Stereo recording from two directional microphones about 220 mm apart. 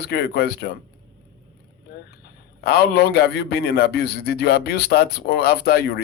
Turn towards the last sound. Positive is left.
turn(degrees=45)  # may be behind; listen again after turning